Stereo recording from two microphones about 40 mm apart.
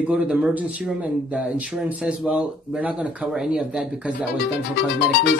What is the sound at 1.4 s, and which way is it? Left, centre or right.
Speech, right.